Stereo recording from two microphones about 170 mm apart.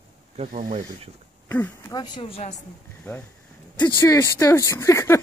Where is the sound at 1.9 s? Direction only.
30° left (ahead or behind).